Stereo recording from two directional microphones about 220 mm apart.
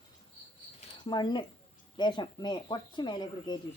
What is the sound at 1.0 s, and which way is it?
Speech, 20° left (ahead or behind).